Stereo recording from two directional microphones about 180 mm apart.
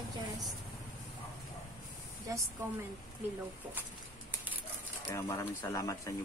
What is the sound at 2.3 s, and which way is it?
Speech, 20° right (ahead or behind).